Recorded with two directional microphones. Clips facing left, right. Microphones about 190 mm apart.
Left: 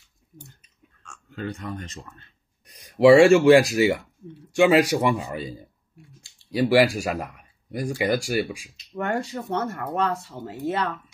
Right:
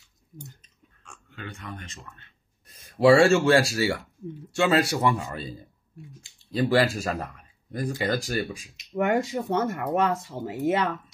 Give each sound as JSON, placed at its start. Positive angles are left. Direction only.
{"t": 1.3, "sound": "speech", "side_deg": 40}
{"t": 2.6, "sound": "speech", "side_deg": 15}
{"t": 8.9, "sound": "speech", "side_deg": -15}